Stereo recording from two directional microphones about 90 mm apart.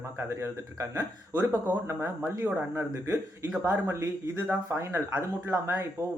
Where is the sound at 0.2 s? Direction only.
30° right (ahead or behind).